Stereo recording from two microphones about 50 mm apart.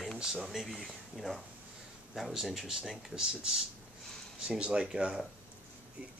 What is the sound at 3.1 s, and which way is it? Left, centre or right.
Speech, centre.